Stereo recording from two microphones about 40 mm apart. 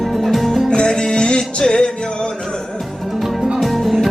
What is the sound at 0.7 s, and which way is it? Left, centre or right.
Music, left.